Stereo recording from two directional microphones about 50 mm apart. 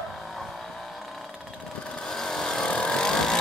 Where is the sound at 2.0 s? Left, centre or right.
Centre.